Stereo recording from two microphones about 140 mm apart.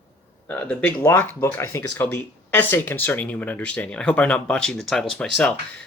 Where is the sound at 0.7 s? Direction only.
10° left (ahead or behind).